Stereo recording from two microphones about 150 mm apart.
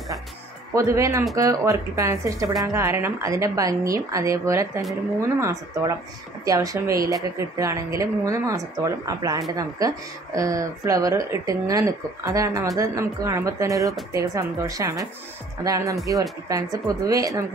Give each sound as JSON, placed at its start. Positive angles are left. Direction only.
{"t": 0.7, "sound": "speech", "side_deg": -20}